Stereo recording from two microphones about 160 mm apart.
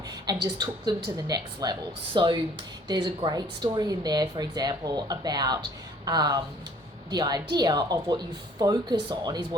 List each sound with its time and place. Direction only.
0.6 s speech: 25° right (ahead or behind)